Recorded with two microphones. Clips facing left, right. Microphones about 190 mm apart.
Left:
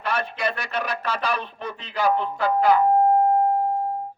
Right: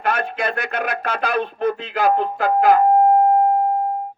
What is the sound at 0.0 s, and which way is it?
A man's voice, 50° right (ahead or behind).